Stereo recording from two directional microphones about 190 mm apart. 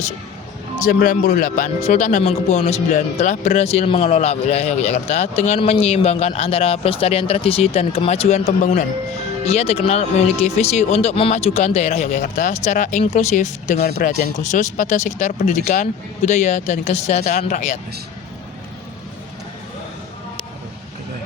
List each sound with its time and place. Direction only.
0.8 s speech: 45° left (ahead or behind)